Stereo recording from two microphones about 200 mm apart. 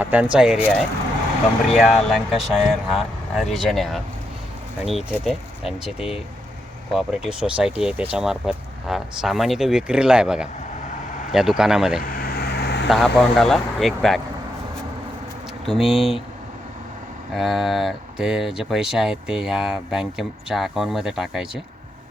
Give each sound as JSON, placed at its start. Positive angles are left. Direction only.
{"t": 0.0, "sound": "speech", "side_deg": -5}
{"t": 6.9, "sound": "speech", "side_deg": -5}
{"t": 12.0, "sound": "vehicle", "side_deg": 50}
{"t": 12.9, "sound": "speech", "side_deg": 0}
{"t": 15.8, "sound": "speech", "side_deg": 0}
{"t": 17.3, "sound": "speech", "side_deg": 0}